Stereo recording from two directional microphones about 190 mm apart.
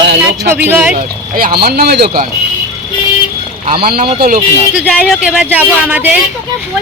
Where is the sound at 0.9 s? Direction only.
50° right (ahead or behind).